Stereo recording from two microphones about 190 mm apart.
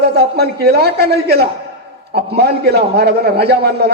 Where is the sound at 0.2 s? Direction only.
60° right (ahead or behind).